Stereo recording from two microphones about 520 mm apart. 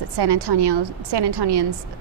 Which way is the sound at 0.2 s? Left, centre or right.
Right.